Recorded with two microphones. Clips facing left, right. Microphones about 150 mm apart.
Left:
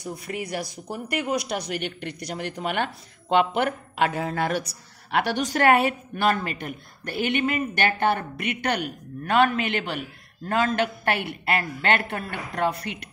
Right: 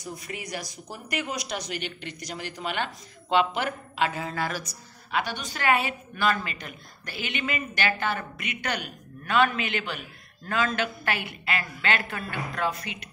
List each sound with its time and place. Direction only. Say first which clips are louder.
0.0 s speech: left 5 dB; 60° left (ahead or behind)